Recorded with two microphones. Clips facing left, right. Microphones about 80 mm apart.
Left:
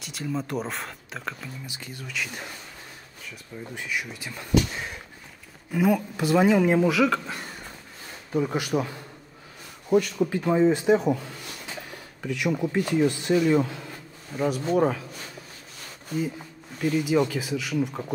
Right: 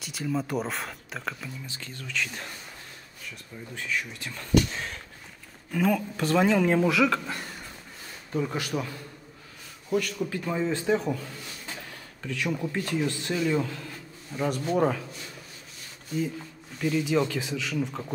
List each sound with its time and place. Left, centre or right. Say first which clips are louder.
0.0 s speech: right 1 dB; centre
1.7 s speech: even; centre
3.7 s speech: even; centre
13.5 s bee: left 5 dB; centre
14.8 s speech: left 1 dB; centre
16.9 s speech: left 2 dB; centre